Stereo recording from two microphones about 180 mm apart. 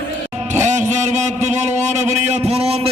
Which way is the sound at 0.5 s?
40° right (ahead or behind).